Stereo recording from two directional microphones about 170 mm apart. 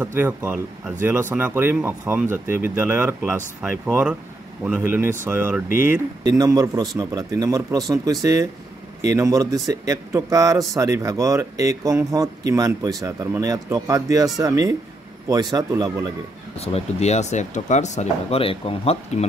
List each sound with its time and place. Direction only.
0.0 s a man's voice: 15° right (ahead or behind)
16.5 s speech: 35° left (ahead or behind)